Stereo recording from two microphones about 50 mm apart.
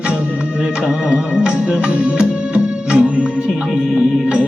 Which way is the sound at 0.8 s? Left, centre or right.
Centre.